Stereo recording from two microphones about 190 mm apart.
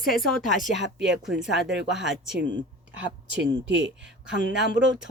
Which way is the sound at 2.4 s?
70° right (ahead or behind).